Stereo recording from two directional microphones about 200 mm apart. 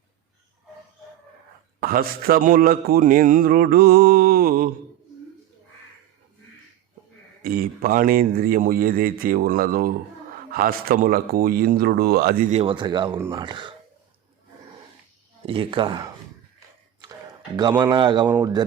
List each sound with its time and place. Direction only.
1.8 s speech: 50° right (ahead or behind)
7.4 s speech: 45° right (ahead or behind); by 13.7 s 25° right (ahead or behind)
15.4 s speech: 25° right (ahead or behind)
17.6 s speech: 20° right (ahead or behind)